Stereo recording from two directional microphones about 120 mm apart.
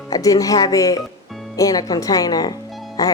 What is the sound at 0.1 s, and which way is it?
Music, 30° left (ahead or behind).